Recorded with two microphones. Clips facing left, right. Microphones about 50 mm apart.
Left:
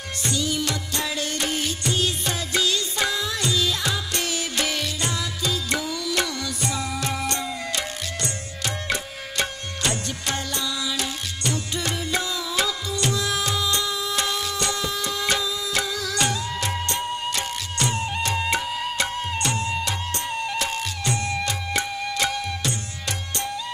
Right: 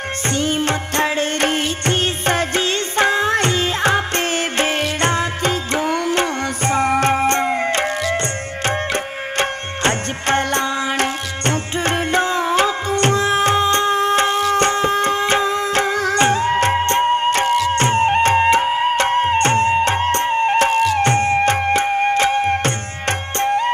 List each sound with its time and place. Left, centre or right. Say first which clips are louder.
0.3 s music: right 6 dB; right